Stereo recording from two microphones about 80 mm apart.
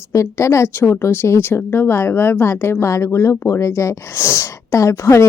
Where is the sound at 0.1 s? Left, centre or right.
Left.